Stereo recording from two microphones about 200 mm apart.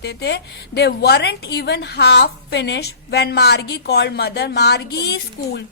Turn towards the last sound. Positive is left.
turn(degrees=55)  # may be behind; listen again after turning